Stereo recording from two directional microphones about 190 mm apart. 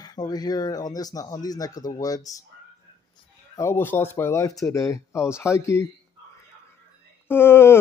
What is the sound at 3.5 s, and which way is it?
Speech, 15° left (ahead or behind).